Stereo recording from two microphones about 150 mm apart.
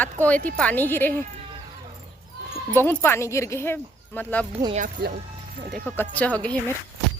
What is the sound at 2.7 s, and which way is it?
Speech, 15° left (ahead or behind).